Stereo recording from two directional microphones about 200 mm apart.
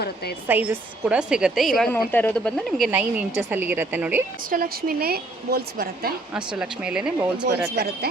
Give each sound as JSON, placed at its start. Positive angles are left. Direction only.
{"t": 0.4, "sound": "a woman's voice", "side_deg": -10}
{"t": 4.4, "sound": "a woman's voice", "side_deg": -45}
{"t": 6.3, "sound": "a woman's voice", "side_deg": -5}